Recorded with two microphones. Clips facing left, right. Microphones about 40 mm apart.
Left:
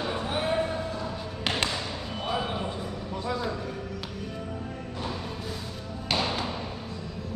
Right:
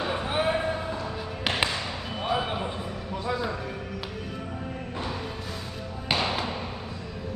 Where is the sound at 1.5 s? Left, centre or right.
Centre.